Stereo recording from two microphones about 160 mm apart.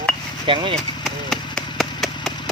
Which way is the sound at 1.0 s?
Centre (ahead or behind).